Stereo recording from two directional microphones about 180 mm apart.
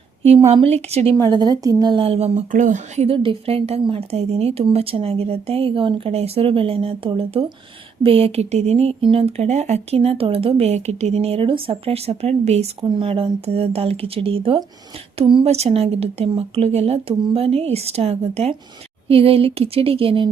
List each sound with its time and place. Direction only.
0.3 s speech: 35° right (ahead or behind)
1.1 s a woman's voice: 20° right (ahead or behind)